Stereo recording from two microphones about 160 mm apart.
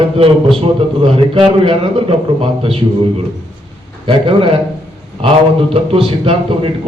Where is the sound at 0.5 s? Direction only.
35° right (ahead or behind).